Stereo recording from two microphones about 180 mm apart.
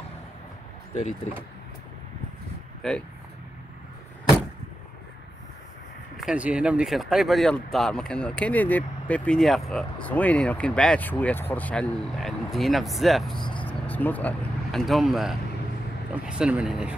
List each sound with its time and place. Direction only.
2.8 s speech: centre (ahead or behind)
6.1 s speech: 5° right (ahead or behind)
13.4 s speech: 25° left (ahead or behind)
13.7 s speech: 10° left (ahead or behind); by 16.9 s 5° right (ahead or behind)